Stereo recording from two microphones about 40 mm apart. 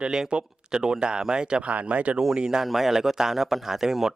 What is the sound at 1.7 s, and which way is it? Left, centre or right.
Speech, right.